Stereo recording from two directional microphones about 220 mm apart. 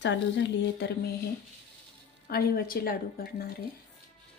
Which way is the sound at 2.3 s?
45° left (ahead or behind).